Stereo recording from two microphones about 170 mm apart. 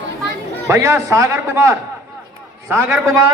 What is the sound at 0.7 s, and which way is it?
A man's voice, 15° right (ahead or behind).